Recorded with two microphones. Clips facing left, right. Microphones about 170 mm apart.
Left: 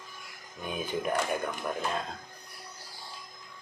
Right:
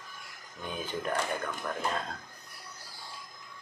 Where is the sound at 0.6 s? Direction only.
15° left (ahead or behind).